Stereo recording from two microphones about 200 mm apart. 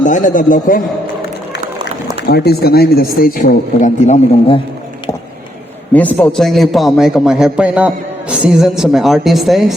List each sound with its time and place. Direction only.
0.0 s a man's voice: 40° left (ahead or behind)
2.2 s speech: 55° left (ahead or behind); by 4.6 s 30° left (ahead or behind)
5.9 s a man's voice: 10° left (ahead or behind)